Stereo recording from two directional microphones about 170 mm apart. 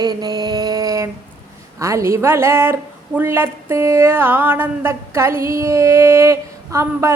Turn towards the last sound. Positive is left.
turn(degrees=-15)  # may be behind; listen again after turning